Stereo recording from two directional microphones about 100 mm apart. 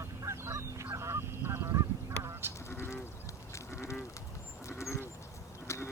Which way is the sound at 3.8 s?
30° left (ahead or behind).